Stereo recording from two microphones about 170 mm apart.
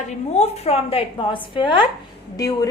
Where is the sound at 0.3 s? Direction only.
40° left (ahead or behind).